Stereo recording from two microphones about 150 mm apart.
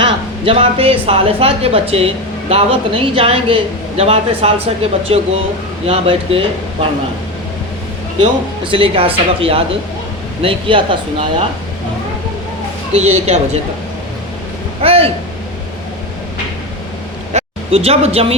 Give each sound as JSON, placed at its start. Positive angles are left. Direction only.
{"t": 0.0, "sound": "speech", "side_deg": -40}
{"t": 8.2, "sound": "speech", "side_deg": -35}
{"t": 12.9, "sound": "a woman's voice", "side_deg": -45}
{"t": 14.8, "sound": "a sound", "side_deg": -40}
{"t": 17.3, "sound": "speech", "side_deg": -40}